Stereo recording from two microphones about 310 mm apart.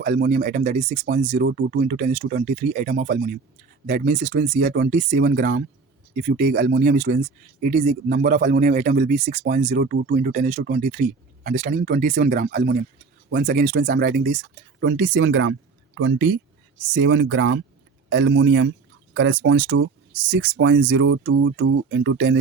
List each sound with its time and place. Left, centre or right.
0.0 s speech: right